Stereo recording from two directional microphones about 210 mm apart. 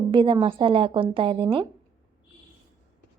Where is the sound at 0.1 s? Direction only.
25° right (ahead or behind).